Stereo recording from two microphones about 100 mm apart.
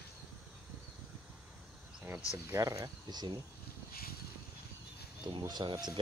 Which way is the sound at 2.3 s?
30° right (ahead or behind).